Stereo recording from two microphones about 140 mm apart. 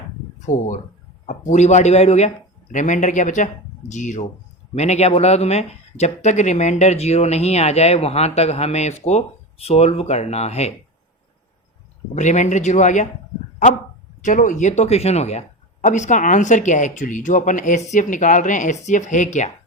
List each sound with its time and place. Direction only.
0.5 s speech: 70° left (ahead or behind)
1.3 s speech: 60° left (ahead or behind)
2.7 s speech: 60° left (ahead or behind)
12.1 s speech: 60° left (ahead or behind)
14.3 s speech: 65° left (ahead or behind)